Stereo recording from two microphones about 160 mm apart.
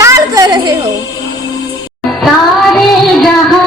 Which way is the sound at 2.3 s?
Centre (ahead or behind).